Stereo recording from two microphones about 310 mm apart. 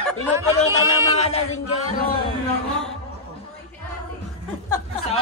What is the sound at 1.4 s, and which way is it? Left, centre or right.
Speech, left.